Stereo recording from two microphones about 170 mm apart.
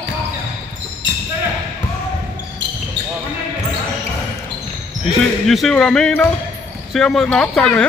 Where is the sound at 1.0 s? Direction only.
90° right.